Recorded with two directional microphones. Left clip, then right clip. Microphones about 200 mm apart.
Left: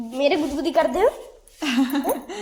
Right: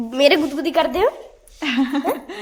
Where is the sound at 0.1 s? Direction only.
35° right (ahead or behind).